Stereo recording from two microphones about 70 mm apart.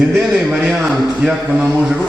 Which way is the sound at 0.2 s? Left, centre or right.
Centre.